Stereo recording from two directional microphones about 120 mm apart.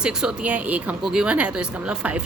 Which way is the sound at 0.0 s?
5° right (ahead or behind).